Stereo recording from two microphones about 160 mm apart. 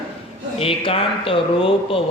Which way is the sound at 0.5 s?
35° left (ahead or behind).